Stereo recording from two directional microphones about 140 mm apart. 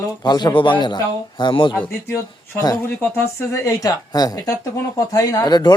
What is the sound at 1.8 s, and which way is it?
Speech, 20° left (ahead or behind).